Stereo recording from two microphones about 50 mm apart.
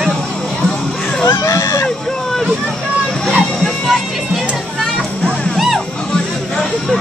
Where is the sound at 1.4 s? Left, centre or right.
Left.